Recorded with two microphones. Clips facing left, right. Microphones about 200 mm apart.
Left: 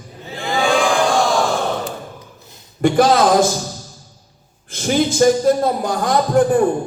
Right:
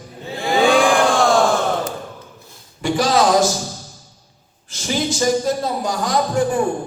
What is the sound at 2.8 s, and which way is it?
Speech, 55° left (ahead or behind).